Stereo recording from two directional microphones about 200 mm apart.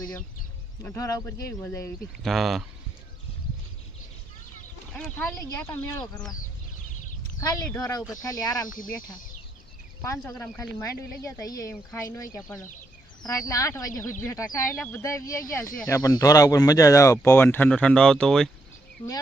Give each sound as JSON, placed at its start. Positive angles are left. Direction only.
{"t": 0.0, "sound": "speech", "side_deg": 10}
{"t": 2.2, "sound": "speech", "side_deg": 0}
{"t": 4.9, "sound": "speech", "side_deg": 5}
{"t": 7.3, "sound": "speech", "side_deg": 15}
{"t": 10.0, "sound": "speech", "side_deg": 15}